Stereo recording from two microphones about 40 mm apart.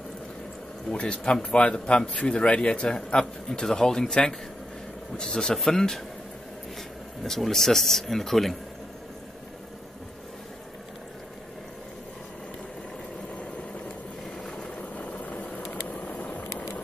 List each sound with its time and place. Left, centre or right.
0.9 s a man's voice: left; by 6.0 s centre
7.2 s speech: centre
14.5 s vehicle: left